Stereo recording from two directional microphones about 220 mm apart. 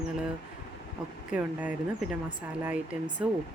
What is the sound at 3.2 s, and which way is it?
Speech, 5° right (ahead or behind).